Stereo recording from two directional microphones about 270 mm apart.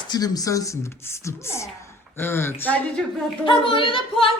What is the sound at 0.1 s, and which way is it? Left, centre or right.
A woman's voice, centre.